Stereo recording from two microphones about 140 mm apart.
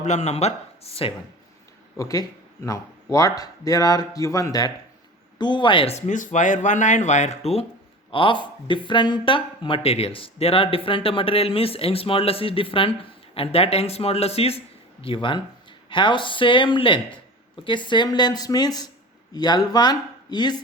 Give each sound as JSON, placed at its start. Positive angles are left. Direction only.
{"t": 0.0, "sound": "speech", "side_deg": 55}
{"t": 2.0, "sound": "speech", "side_deg": 25}
{"t": 6.1, "sound": "speech", "side_deg": 65}
{"t": 8.1, "sound": "speech", "side_deg": 35}